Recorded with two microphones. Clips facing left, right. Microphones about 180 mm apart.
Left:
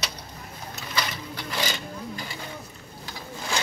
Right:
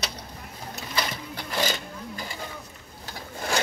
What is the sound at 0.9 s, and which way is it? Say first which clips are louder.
Sewing machine: even; 45° right (ahead or behind).